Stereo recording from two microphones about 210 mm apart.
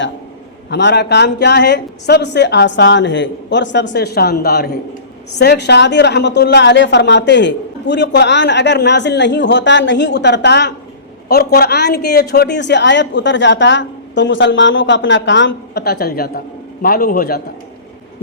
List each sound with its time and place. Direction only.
0.7 s a woman's voice: 55° left (ahead or behind)